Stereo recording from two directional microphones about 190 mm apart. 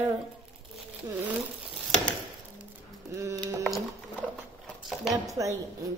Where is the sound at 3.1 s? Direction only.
15° right (ahead or behind).